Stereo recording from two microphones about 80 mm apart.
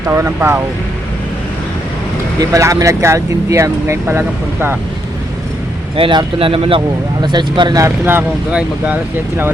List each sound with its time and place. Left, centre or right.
0.0 s speech: right
2.4 s speech: right
6.0 s speech: right
8.4 s speech: centre